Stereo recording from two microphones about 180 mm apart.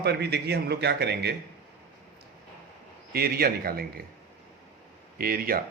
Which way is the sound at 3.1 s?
60° right (ahead or behind).